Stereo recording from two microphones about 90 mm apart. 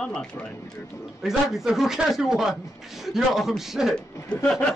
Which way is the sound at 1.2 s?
5° right (ahead or behind).